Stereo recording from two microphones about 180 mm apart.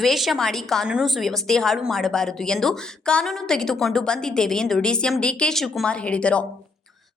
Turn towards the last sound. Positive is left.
turn(degrees=5)  # may be behind; listen again after turning